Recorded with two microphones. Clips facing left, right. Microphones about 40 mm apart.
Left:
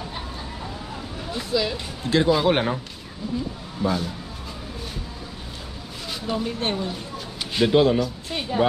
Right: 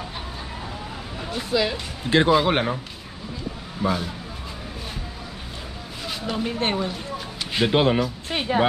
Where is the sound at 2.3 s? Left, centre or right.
Centre.